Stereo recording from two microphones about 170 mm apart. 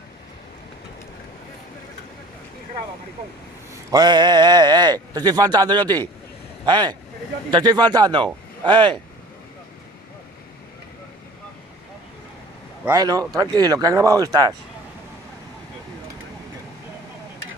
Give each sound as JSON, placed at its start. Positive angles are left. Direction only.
{"t": 3.9, "sound": "speech", "side_deg": -25}
{"t": 12.8, "sound": "speech", "side_deg": -20}